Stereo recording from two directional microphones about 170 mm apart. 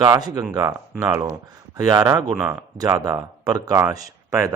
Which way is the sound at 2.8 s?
20° right (ahead or behind).